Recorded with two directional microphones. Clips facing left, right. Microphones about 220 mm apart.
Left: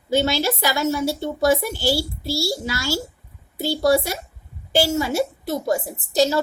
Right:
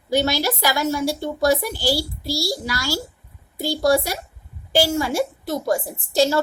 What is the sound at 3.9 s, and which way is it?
A woman's voice, 25° left (ahead or behind).